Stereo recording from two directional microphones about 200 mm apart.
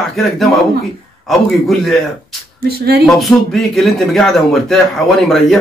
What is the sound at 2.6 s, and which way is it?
Speech, 50° right (ahead or behind).